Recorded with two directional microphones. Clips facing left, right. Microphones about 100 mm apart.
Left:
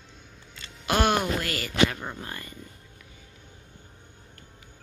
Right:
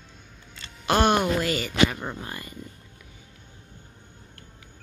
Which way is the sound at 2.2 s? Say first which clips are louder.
Right 2 dB; 20° right (ahead or behind).